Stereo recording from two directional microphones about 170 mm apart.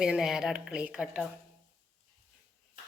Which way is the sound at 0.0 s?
5° right (ahead or behind).